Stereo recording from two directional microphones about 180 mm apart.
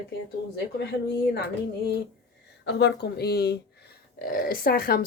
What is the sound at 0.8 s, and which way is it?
Speech, 70° left (ahead or behind).